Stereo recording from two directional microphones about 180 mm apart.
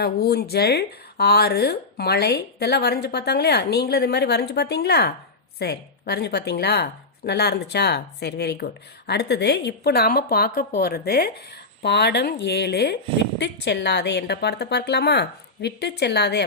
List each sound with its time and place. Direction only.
0.0 s a woman's voice: 60° left (ahead or behind)